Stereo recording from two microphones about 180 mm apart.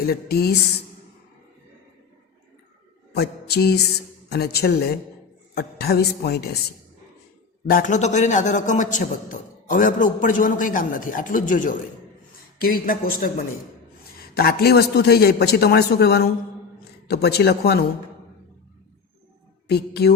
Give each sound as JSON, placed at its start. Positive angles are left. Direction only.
{"t": 0.0, "sound": "a man's voice", "side_deg": 60}
{"t": 3.2, "sound": "a man's voice", "side_deg": 65}
{"t": 7.7, "sound": "a man's voice", "side_deg": 45}
{"t": 19.6, "sound": "a man's voice", "side_deg": 65}